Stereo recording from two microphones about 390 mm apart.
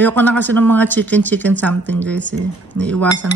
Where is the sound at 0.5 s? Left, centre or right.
Centre.